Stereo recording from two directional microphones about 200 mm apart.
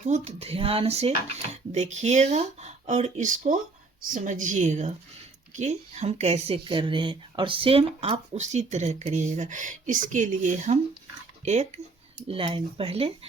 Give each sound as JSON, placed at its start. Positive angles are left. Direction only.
{"t": 0.0, "sound": "speech", "side_deg": -35}